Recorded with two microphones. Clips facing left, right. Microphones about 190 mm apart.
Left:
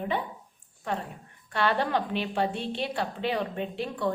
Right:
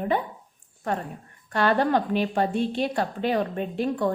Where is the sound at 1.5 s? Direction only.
45° right (ahead or behind).